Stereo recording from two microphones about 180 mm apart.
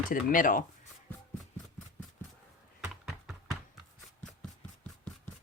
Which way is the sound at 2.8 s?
Centre (ahead or behind).